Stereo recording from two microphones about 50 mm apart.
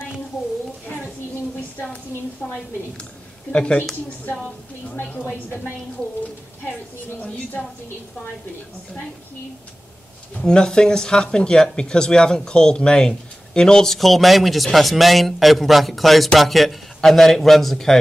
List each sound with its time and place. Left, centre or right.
2.4 s a woman's voice: centre
4.3 s a woman's voice: left
7.2 s a woman's voice: left
10.3 s speech: centre
13.9 s a man's voice: centre